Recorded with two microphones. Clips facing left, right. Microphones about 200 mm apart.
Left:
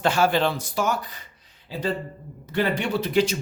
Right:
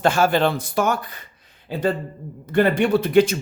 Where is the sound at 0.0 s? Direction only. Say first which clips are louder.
Right 3 dB; 50° right (ahead or behind).